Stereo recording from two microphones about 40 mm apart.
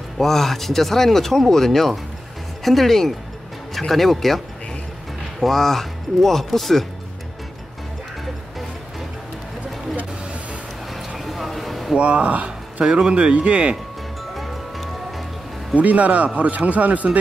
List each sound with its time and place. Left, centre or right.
0.2 s speech: centre
5.4 s speech: centre
11.1 s a sound: centre
12.0 s speech: right
12.8 s speech: centre
13.1 s speech: right
14.3 s music: centre
15.7 s speech: right